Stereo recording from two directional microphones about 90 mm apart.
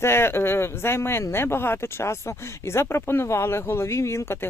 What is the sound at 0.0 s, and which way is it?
Speech, 25° left (ahead or behind).